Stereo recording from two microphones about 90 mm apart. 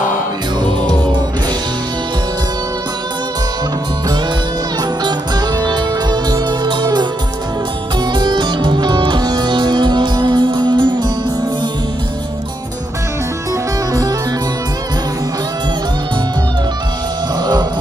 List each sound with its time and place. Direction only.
5.6 s music: 50° right (ahead or behind)
8.1 s music: 55° right (ahead or behind)
17.4 s music: 50° right (ahead or behind)